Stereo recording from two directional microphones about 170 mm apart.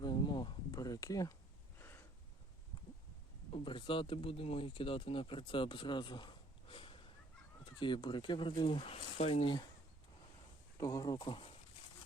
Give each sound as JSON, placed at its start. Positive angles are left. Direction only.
{"t": 0.0, "sound": "a sound", "side_deg": 25}
{"t": 3.5, "sound": "speech", "side_deg": 30}
{"t": 10.8, "sound": "speech", "side_deg": 20}